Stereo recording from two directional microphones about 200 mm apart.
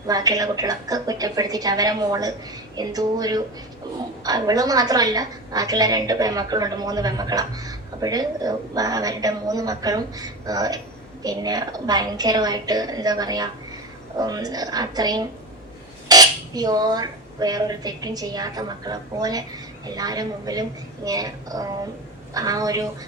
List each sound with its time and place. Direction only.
0.1 s a woman's voice: 20° right (ahead or behind)